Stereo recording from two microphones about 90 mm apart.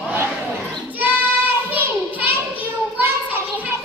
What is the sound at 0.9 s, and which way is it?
Child singing, 20° right (ahead or behind).